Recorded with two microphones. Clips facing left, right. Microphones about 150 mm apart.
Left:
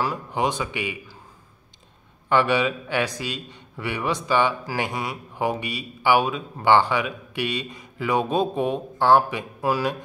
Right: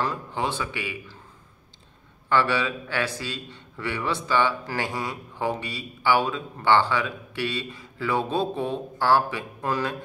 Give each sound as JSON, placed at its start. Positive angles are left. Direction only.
{"t": 0.0, "sound": "a man's voice", "side_deg": 15}
{"t": 2.2, "sound": "a man's voice", "side_deg": 15}
{"t": 9.6, "sound": "a man's voice", "side_deg": 10}